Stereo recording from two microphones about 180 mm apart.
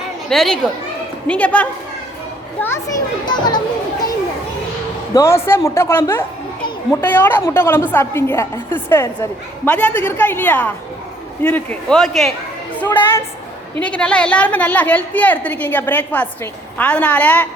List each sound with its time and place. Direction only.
0.3 s a man's voice: centre (ahead or behind); by 3.6 s 25° left (ahead or behind)
5.1 s a woman's voice: 15° left (ahead or behind)